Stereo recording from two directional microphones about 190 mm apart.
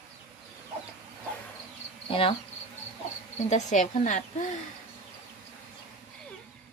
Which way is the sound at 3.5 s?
40° left (ahead or behind).